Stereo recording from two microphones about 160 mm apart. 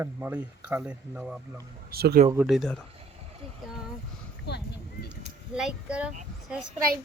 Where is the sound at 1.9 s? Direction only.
75° right (ahead or behind).